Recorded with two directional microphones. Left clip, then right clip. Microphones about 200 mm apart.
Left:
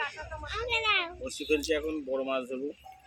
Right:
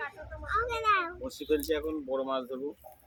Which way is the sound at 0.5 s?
55° right (ahead or behind).